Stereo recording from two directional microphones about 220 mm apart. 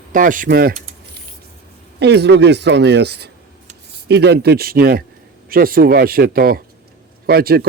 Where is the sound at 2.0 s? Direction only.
50° right (ahead or behind).